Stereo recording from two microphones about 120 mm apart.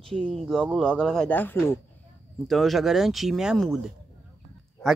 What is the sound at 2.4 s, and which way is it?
Speech, centre (ahead or behind).